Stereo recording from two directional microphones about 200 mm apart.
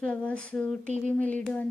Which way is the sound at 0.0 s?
5° left (ahead or behind).